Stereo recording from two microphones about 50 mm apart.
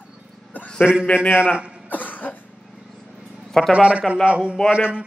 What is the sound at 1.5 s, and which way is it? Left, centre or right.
Speech, right.